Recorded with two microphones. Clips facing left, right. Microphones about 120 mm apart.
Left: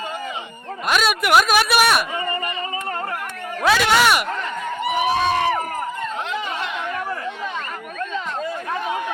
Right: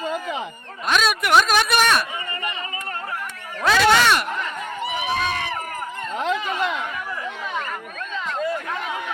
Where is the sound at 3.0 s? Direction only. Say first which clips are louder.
Left 3 dB; 60° left (ahead or behind).